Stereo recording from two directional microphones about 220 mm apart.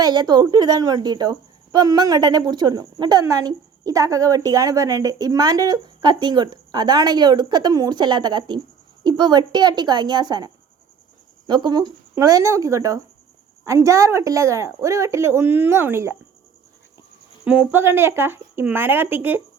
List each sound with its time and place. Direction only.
0.0 s a woman's voice: 20° right (ahead or behind)
17.4 s a woman's voice: 5° right (ahead or behind)